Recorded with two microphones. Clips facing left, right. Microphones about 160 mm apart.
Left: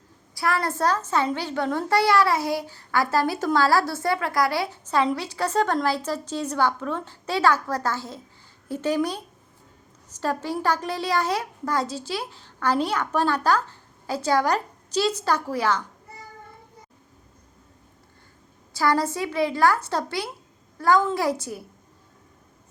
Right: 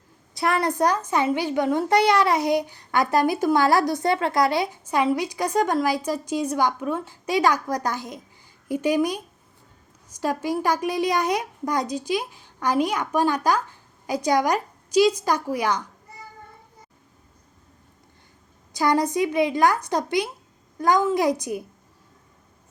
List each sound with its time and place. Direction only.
0.3 s a child's voice: 20° right (ahead or behind)
18.7 s a child's voice: 20° right (ahead or behind)